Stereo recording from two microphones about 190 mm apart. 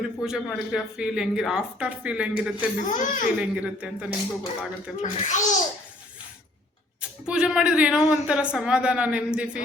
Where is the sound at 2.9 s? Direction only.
40° left (ahead or behind).